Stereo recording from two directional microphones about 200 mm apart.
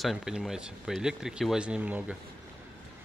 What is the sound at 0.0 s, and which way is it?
Speech, centre (ahead or behind).